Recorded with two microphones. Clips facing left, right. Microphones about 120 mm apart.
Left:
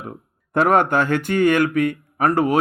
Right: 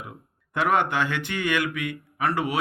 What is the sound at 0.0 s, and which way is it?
Speech, 45° left (ahead or behind).